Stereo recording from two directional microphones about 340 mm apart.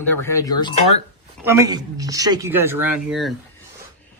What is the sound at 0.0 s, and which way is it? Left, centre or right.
Speech, centre.